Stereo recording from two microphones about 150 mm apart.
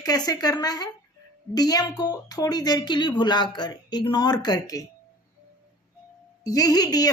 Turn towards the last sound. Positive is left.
turn(degrees=25)  # may be behind; listen again after turning